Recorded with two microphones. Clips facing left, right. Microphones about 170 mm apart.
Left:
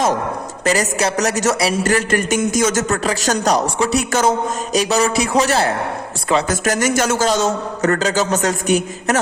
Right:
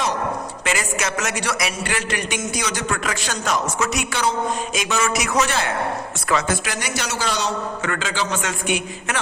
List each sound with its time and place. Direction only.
0.6 s a man's voice: 40° left (ahead or behind)